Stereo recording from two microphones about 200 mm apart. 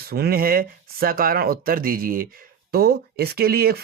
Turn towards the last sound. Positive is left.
turn(degrees=-50)  # may be behind; listen again after turning